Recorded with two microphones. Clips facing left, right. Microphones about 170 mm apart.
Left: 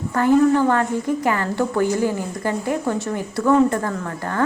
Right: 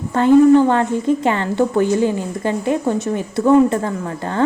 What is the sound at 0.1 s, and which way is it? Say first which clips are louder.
A woman's voice: right 6 dB; 20° right (ahead or behind).